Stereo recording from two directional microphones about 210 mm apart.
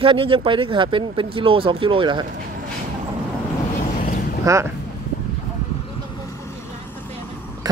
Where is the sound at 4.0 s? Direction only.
40° left (ahead or behind).